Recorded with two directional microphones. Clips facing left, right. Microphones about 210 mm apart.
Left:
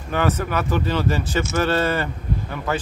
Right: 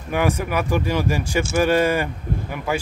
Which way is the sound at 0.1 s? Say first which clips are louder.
Right 1 dB; 10° right (ahead or behind).